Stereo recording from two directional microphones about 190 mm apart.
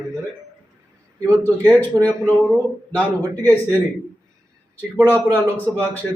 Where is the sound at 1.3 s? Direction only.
10° left (ahead or behind).